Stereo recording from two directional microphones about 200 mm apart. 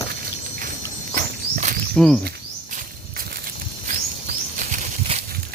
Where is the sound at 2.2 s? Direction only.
45° right (ahead or behind).